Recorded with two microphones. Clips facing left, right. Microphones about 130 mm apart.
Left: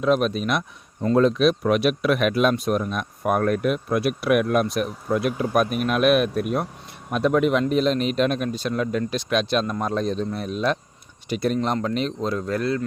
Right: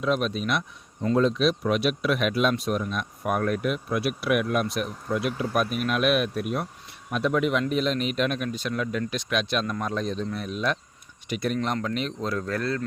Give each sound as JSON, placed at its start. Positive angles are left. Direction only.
{"t": 0.0, "sound": "speech", "side_deg": 50}